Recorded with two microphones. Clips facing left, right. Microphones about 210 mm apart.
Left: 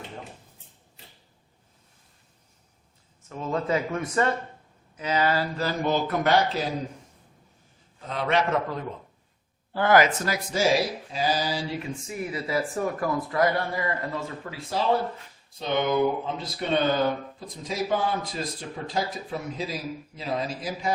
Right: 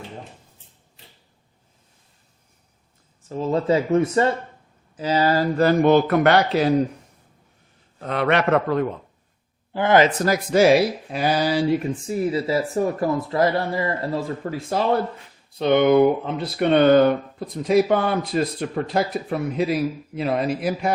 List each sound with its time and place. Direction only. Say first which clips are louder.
3.2 s speech: right 7 dB; 30° right (ahead or behind)
5.5 s speech: right 10 dB; 60° right (ahead or behind)
8.0 s speech: right 5 dB; 65° right (ahead or behind)
9.7 s speech: right 3 dB; 20° right (ahead or behind)
10.2 s speech: right 8 dB; 45° right (ahead or behind)
10.5 s speech: right 8 dB; 65° right (ahead or behind)
11.9 s speech: right 9 dB; 35° right (ahead or behind); by 14.8 s 50° right (ahead or behind)
15.5 s speech: right 9 dB; 65° right (ahead or behind)